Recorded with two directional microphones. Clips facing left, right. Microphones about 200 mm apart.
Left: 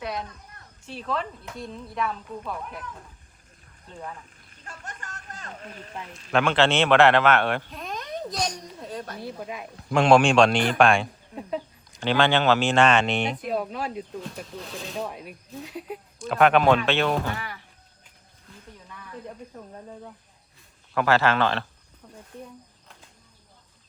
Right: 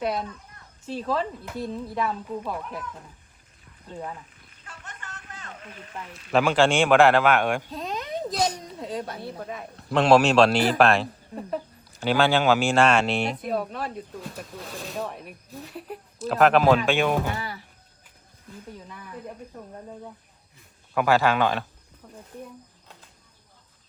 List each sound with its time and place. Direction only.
0.0 s a child's voice: 30° right (ahead or behind)
1.5 s speech: 5° right (ahead or behind)
4.6 s a sound: 45° left (ahead or behind)
6.0 s a man's voice: 5° right (ahead or behind)
7.7 s a sound: 30° right (ahead or behind)
8.3 s speech: 5° right (ahead or behind)
9.2 s speech: 5° left (ahead or behind)
17.3 s speech: 30° right (ahead or behind)
20.9 s a man's voice: 10° right (ahead or behind)
22.0 s snake: 5° right (ahead or behind)